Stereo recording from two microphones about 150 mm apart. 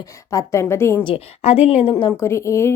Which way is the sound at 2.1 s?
20° left (ahead or behind).